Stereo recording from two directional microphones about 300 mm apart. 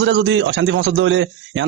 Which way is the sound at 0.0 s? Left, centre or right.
Right.